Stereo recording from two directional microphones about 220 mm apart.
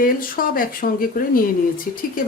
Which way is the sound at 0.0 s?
40° left (ahead or behind).